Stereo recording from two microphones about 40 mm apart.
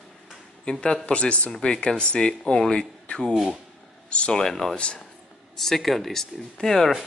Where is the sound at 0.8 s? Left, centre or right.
Centre.